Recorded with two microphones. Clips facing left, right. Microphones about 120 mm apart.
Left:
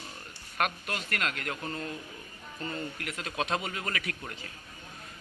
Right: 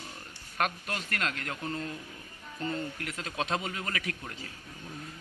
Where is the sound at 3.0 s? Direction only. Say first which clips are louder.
Left 1 dB; 30° right (ahead or behind).